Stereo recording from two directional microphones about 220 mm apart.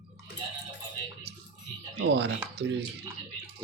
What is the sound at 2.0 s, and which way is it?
Speech, 50° right (ahead or behind).